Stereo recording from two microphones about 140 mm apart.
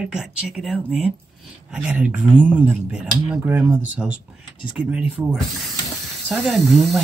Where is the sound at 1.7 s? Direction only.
10° right (ahead or behind).